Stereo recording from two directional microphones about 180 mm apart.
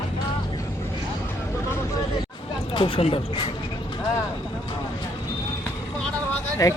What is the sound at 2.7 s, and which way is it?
Speech, 30° left (ahead or behind).